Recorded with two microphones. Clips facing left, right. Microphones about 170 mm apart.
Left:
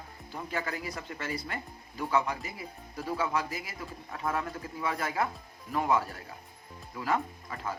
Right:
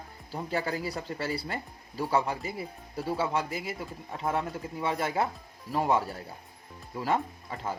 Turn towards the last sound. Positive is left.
turn(degrees=-30)  # may be behind; listen again after turning